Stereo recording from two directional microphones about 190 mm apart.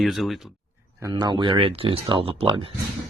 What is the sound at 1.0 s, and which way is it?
Speech, 20° right (ahead or behind).